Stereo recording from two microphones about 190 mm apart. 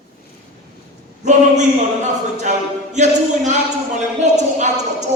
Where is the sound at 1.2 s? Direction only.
40° right (ahead or behind).